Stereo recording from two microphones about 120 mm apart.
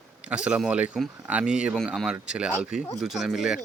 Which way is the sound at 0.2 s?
10° right (ahead or behind).